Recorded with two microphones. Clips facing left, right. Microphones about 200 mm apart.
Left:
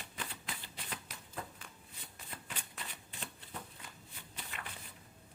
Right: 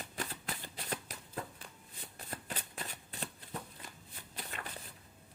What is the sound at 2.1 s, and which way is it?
Shuffling cards, 40° right (ahead or behind).